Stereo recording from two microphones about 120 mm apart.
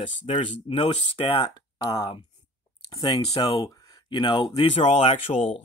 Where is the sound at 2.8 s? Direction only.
35° left (ahead or behind).